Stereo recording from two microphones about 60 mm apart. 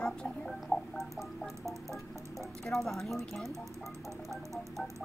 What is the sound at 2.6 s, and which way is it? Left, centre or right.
Speech, centre.